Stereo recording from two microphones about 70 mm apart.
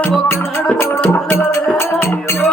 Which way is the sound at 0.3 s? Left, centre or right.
Left.